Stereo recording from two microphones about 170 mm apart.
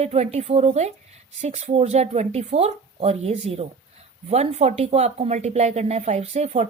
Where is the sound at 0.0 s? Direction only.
40° right (ahead or behind).